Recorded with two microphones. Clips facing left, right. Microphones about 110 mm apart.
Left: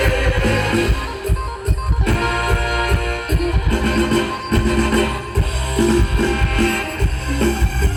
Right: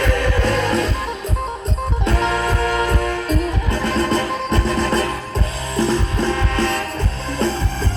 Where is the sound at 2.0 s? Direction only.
25° right (ahead or behind).